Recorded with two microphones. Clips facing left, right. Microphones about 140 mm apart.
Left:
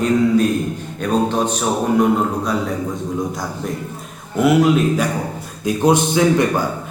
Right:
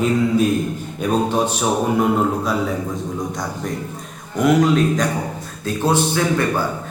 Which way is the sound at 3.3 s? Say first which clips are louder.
Even; centre (ahead or behind).